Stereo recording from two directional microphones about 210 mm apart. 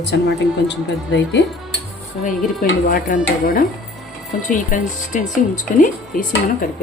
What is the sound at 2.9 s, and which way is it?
Speech, 40° left (ahead or behind).